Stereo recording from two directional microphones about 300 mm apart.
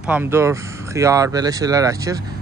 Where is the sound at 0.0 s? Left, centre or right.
Centre.